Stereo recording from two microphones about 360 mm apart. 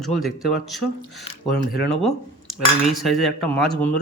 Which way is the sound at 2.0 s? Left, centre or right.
Centre.